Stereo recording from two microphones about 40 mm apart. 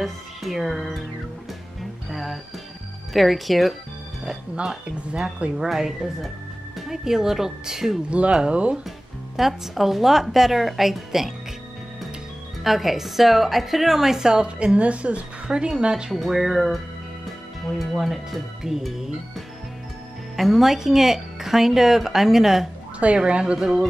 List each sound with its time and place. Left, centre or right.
0.0 s speech: centre
2.0 s music: centre
3.1 s speech: centre
4.8 s speech: right
5.6 s a woman's voice: centre
8.1 s speech: right
9.4 s a woman's voice: centre
12.6 s a woman's voice: centre
16.1 s a woman's voice: centre
22.9 s speech: right